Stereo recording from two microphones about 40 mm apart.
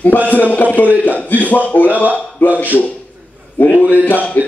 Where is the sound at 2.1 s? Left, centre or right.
Left.